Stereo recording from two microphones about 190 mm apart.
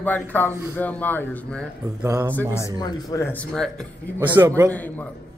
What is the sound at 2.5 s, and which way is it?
Speech, 20° left (ahead or behind).